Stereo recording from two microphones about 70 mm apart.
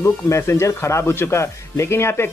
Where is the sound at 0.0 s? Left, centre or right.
Left.